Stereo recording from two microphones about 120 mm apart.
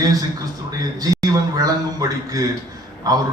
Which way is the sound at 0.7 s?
30° right (ahead or behind).